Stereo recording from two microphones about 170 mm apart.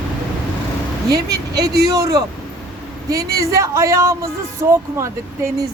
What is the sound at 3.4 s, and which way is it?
Speech, 20° right (ahead or behind).